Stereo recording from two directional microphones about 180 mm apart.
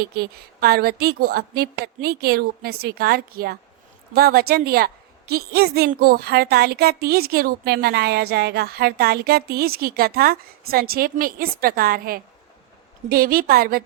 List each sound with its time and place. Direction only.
0.0 s speech: 60° right (ahead or behind)